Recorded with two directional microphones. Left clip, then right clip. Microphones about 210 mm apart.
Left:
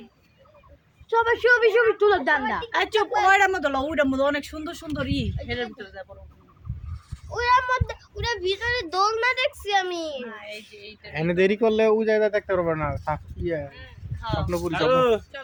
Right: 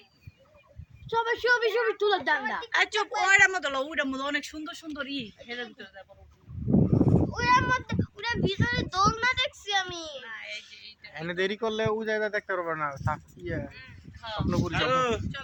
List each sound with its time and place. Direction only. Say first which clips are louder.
1.1 s speech: left 6 dB; 40° right (ahead or behind)
2.7 s a child's voice: left 2 dB; 25° left (ahead or behind)
3.2 s speech: left 1 dB; 35° left (ahead or behind); by 6.1 s 65° left (ahead or behind)
7.0 s a child's voice: right 1 dB; centre (ahead or behind); by 10.2 s 15° left (ahead or behind)
10.2 s speech: left 2 dB; 35° left (ahead or behind)
11.1 s speech: left 8 dB; 10° left (ahead or behind)
14.4 s speech: left 4 dB; 35° left (ahead or behind)